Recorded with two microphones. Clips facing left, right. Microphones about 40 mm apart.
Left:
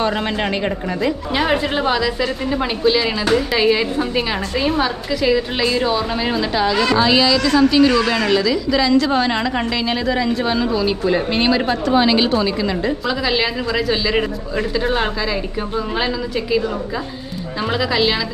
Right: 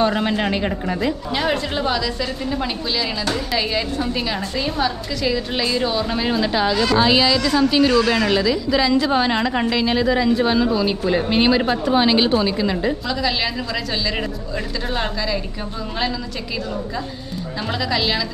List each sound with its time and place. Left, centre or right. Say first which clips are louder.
0.0 s a woman's voice: right 1 dB; centre
6.7 s a woman's voice: left 2 dB; left
7.0 s a woman's voice: left 1 dB; centre